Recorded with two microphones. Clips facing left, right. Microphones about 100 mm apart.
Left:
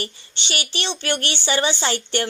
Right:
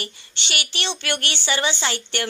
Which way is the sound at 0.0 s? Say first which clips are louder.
Left 3 dB; 30° left (ahead or behind).